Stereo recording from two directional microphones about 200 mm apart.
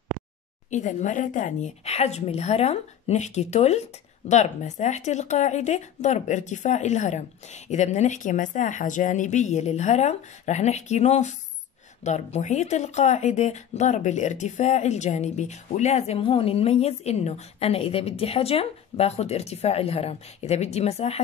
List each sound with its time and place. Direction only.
0.7 s speech: 35° left (ahead or behind)